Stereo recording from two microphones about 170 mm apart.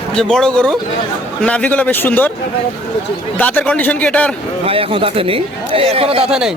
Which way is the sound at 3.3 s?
10° left (ahead or behind).